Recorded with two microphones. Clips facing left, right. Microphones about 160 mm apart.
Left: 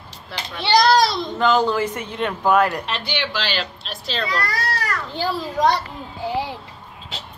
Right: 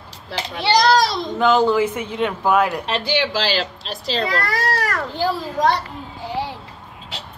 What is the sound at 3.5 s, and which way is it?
Speech, 90° right.